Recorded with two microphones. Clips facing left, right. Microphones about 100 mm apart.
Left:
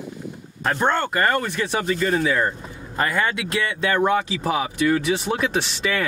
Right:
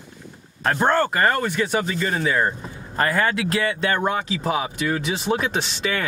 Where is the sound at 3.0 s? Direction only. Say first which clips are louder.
Right 2 dB; 30° right (ahead or behind).